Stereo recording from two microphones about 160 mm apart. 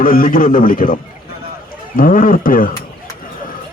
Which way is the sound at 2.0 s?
60° left (ahead or behind).